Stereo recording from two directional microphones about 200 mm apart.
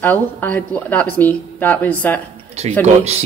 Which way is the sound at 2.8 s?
30° right (ahead or behind).